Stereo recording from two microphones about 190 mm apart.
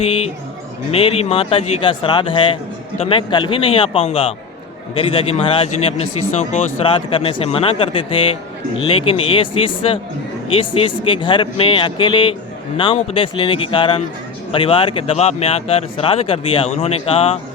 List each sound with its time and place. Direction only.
0.0 s speech: 30° left (ahead or behind)